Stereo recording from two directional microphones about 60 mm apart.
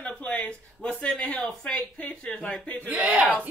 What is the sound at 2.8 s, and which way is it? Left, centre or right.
Speech, right.